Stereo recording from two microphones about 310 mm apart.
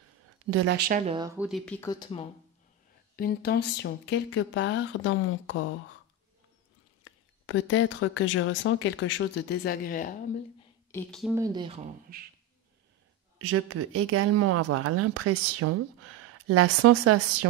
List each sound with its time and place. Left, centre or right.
0.5 s speech: right; by 2.2 s centre
3.2 s speech: left
7.1 s speech: left
10.9 s speech: centre
11.3 s speech: centre
13.4 s speech: right